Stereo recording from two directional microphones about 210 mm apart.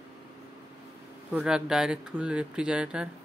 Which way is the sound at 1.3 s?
5° right (ahead or behind).